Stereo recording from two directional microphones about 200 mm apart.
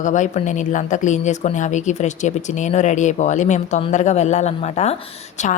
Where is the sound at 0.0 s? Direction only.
40° left (ahead or behind).